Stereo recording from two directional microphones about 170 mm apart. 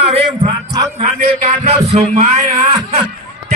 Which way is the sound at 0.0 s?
35° right (ahead or behind).